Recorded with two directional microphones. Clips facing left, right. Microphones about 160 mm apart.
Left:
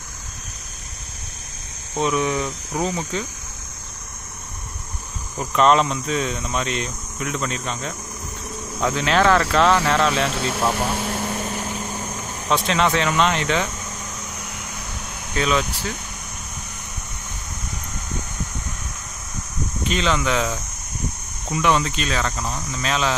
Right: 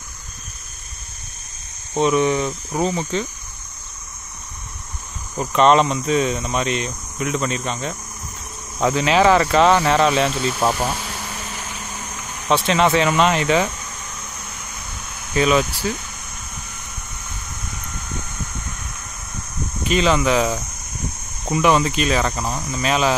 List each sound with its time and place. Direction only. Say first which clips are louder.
2.0 s speech: right 4 dB; centre (ahead or behind)
5.5 s speech: right 2 dB; centre (ahead or behind)
11.0 s vehicle: left 6 dB; 50° left (ahead or behind)
12.4 s speech: right 3 dB; centre (ahead or behind)
15.3 s speech: right 4 dB; 10° right (ahead or behind)
19.8 s speech: right 4 dB; 5° right (ahead or behind)
21.5 s speech: right 3 dB; 10° right (ahead or behind)